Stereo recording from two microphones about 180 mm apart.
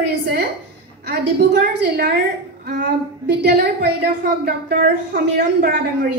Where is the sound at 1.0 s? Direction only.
65° right (ahead or behind).